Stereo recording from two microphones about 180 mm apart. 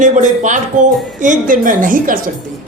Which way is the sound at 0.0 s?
45° right (ahead or behind).